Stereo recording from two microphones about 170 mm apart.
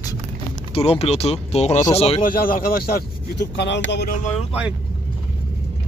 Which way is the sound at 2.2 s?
55° left (ahead or behind).